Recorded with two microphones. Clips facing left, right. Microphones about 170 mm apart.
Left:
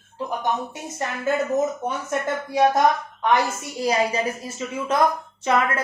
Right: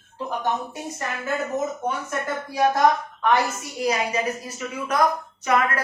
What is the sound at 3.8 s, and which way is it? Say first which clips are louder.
A woman's voice: left 2 dB; 30° left (ahead or behind).